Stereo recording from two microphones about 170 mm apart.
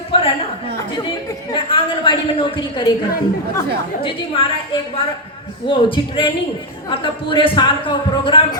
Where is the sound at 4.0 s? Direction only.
30° left (ahead or behind).